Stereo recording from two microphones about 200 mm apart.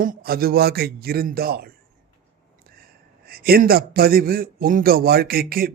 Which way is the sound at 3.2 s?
50° right (ahead or behind).